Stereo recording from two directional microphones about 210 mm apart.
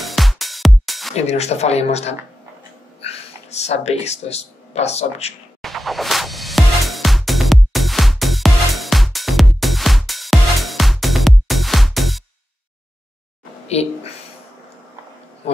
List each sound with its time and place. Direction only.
0.0 s music: centre (ahead or behind)
1.1 s speech: 30° left (ahead or behind)
5.6 s music: centre (ahead or behind)